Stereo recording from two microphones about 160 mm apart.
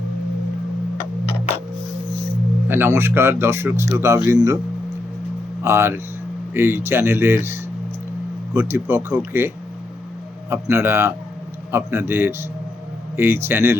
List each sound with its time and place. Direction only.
2.6 s speech: 15° right (ahead or behind)
5.6 s speech: 15° right (ahead or behind)
10.5 s speech: 15° right (ahead or behind)